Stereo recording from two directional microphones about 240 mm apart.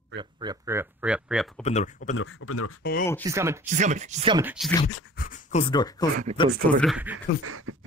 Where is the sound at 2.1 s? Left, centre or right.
Left.